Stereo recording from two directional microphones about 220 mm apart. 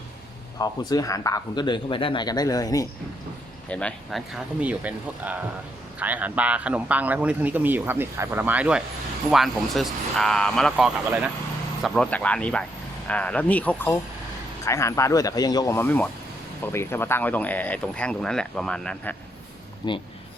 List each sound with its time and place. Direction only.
0.6 s speech: 15° left (ahead or behind)
3.7 s a man's voice: 5° left (ahead or behind)
19.8 s speech: 20° left (ahead or behind)